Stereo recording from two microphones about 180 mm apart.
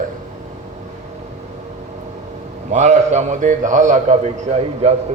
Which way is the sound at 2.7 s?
40° right (ahead or behind).